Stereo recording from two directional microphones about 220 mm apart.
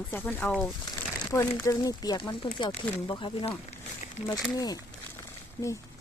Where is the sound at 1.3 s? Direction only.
15° left (ahead or behind).